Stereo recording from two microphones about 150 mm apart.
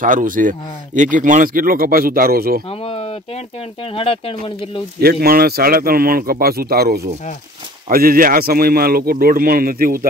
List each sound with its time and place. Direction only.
0.0 s speech: 60° right (ahead or behind); by 2.6 s 80° right
2.7 s a sound: 40° left (ahead or behind)
3.8 s speech: 40° left (ahead or behind)
5.0 s speech: 90° right
7.9 s a man's voice: 75° right (ahead or behind)